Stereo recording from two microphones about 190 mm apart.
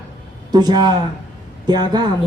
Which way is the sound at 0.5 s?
20° right (ahead or behind).